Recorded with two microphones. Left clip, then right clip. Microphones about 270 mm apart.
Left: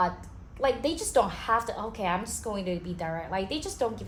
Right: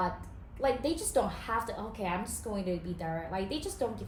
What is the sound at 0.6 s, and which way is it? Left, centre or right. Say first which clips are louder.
A woman's voice: left 3 dB; centre.